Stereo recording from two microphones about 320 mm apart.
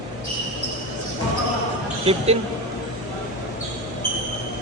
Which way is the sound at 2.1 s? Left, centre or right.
Centre.